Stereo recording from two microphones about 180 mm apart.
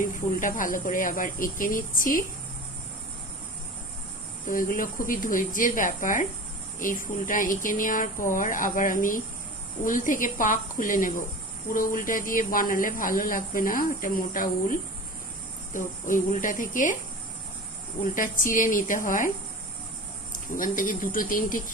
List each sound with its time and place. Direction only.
0.0 s speech: 45° left (ahead or behind)
4.4 s speech: 50° left (ahead or behind)
18.1 s speech: 50° left (ahead or behind)
20.6 s speech: 50° left (ahead or behind)